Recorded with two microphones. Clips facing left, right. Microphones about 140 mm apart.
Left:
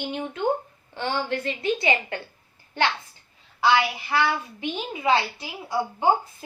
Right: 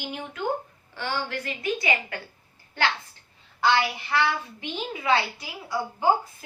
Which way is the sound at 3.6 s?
5° left (ahead or behind).